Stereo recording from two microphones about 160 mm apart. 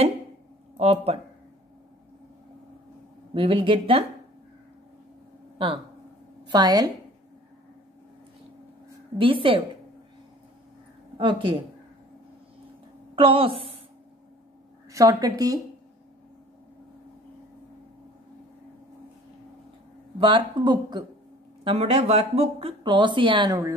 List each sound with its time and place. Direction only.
0.7 s speech: 40° right (ahead or behind)
3.3 s speech: 35° right (ahead or behind)
5.6 s speech: 35° right (ahead or behind)
9.2 s speech: 35° right (ahead or behind)
11.1 s speech: 30° right (ahead or behind)
13.1 s speech: 35° right (ahead or behind)
14.9 s speech: 20° right (ahead or behind)
20.2 s speech: 30° right (ahead or behind)
21.6 s speech: 40° right (ahead or behind)